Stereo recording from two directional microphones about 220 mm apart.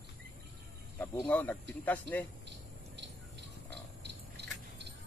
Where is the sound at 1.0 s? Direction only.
10° left (ahead or behind).